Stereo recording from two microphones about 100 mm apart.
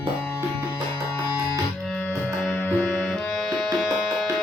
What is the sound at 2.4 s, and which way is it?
Music, 15° left (ahead or behind).